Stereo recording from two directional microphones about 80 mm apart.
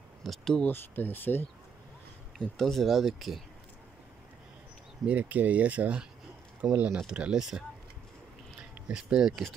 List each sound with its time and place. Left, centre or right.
0.2 s speech: centre
0.7 s speech: left
2.3 s speech: centre
5.0 s speech: centre
8.8 s speech: centre